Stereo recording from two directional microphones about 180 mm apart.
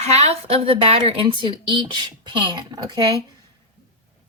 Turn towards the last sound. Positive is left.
turn(degrees=-20)  # may be behind; listen again after turning